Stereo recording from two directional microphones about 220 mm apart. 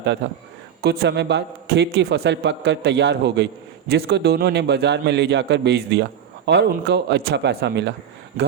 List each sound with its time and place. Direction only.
0.2 s a man's voice: 50° right (ahead or behind)